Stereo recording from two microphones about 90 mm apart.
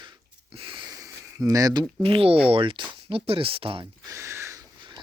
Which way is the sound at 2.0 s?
90° right.